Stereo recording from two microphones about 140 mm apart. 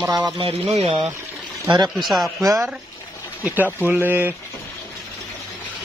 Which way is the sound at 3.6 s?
15° right (ahead or behind).